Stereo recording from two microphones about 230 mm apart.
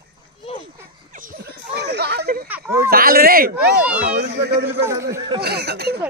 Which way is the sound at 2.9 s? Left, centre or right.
Right.